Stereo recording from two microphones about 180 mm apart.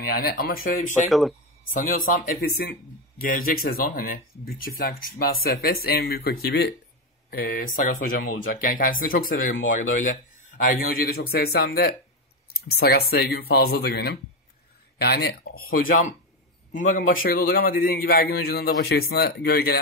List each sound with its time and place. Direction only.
0.0 s speech: 60° left (ahead or behind)